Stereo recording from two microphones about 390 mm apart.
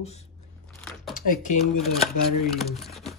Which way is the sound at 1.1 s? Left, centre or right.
Centre.